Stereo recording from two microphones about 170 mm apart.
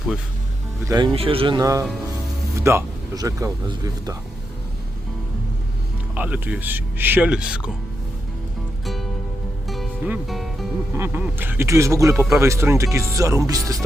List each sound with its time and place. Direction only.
0.9 s speech: 25° right (ahead or behind)
6.1 s speech: 10° right (ahead or behind)
8.8 s music: centre (ahead or behind)
10.9 s speech: 15° right (ahead or behind)